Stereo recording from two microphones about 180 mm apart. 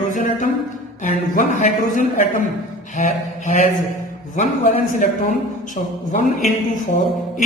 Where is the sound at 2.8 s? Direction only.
40° left (ahead or behind).